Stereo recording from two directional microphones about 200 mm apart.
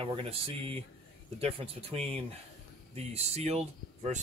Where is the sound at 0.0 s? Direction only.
30° right (ahead or behind).